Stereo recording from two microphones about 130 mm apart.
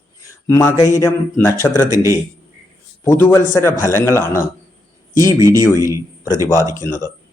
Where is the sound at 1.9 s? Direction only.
25° right (ahead or behind).